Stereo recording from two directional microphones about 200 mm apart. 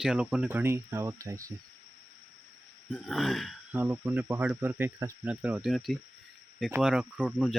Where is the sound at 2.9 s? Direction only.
Centre (ahead or behind).